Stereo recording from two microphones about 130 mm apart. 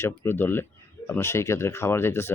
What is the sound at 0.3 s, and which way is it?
Speech, 15° left (ahead or behind).